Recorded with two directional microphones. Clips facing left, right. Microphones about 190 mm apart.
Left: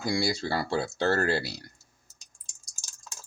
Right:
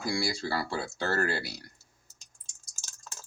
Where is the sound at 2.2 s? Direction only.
15° left (ahead or behind).